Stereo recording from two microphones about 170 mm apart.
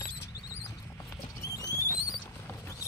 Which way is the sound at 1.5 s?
20° left (ahead or behind).